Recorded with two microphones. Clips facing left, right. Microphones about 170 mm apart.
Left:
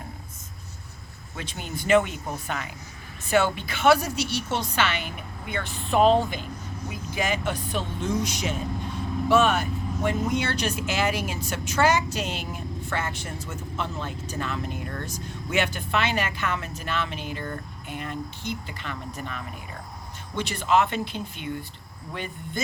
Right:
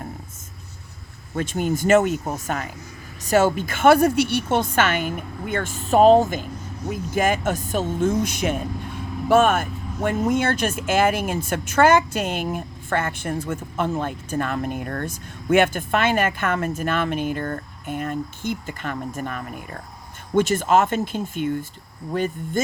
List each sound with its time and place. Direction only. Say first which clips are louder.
1.4 s speech: right 12 dB; 45° right (ahead or behind)